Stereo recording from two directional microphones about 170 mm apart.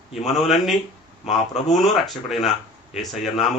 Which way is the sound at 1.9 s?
Centre (ahead or behind).